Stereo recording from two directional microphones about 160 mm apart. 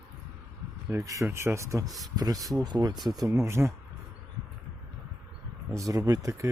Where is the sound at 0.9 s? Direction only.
20° right (ahead or behind).